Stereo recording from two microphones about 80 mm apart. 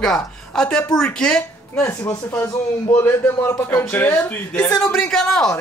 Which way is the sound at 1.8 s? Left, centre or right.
Left.